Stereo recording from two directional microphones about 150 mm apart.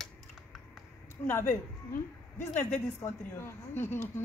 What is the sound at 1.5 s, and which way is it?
A woman's voice, 15° left (ahead or behind).